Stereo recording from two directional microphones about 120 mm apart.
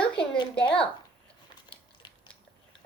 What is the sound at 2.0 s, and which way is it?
Biting, 40° left (ahead or behind).